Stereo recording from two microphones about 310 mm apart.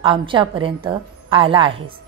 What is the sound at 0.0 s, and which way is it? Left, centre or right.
A woman's voice, centre.